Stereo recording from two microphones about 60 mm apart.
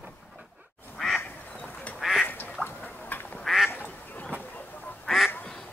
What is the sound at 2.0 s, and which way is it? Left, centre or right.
Duck, centre.